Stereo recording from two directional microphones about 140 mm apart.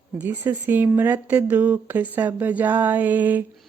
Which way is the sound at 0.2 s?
10° right (ahead or behind).